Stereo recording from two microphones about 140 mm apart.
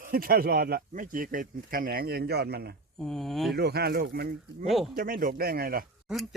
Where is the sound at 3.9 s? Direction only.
90° right.